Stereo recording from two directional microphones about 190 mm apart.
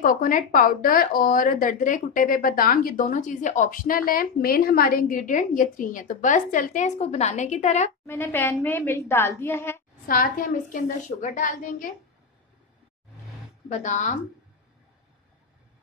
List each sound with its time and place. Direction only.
0.0 s a woman's voice: 45° left (ahead or behind)
8.1 s a woman's voice: 10° left (ahead or behind)
10.0 s a woman's voice: 50° left (ahead or behind)
13.7 s speech: 40° left (ahead or behind)